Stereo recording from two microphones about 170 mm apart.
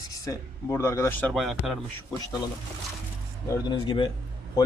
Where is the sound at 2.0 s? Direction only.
20° left (ahead or behind).